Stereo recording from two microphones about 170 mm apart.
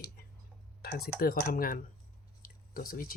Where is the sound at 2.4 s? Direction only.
55° left (ahead or behind).